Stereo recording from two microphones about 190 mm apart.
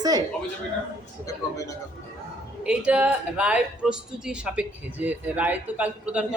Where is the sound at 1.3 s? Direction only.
15° left (ahead or behind).